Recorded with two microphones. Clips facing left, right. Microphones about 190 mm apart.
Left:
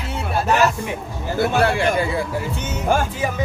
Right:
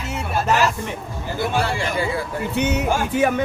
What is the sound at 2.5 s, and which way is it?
Speech, 65° right (ahead or behind).